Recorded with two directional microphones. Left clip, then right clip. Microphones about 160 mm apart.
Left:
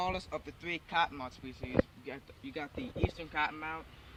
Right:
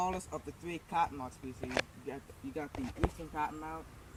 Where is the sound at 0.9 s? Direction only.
45° left (ahead or behind).